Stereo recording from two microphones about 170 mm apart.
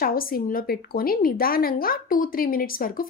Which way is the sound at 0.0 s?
60° left (ahead or behind).